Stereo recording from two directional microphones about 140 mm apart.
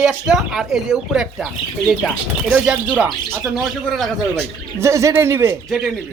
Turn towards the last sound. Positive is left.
turn(degrees=0)  # may be behind; listen again after turning